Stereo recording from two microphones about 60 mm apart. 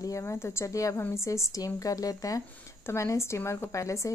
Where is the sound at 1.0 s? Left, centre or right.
Left.